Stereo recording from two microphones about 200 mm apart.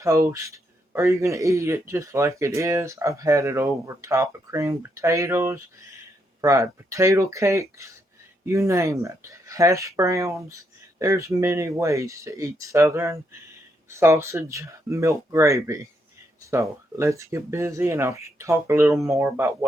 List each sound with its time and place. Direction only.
0.0 s speech: 15° right (ahead or behind)